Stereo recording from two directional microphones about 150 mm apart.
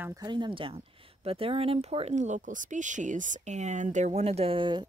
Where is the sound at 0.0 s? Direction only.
25° right (ahead or behind).